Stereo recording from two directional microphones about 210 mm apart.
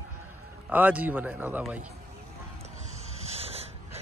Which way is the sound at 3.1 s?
30° right (ahead or behind).